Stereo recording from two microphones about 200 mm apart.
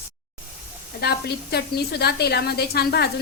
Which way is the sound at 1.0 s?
55° left (ahead or behind).